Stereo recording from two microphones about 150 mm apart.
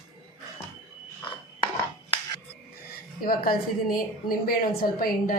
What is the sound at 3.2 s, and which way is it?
A woman's voice, 85° left.